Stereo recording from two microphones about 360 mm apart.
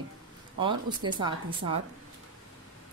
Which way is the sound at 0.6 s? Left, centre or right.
Centre.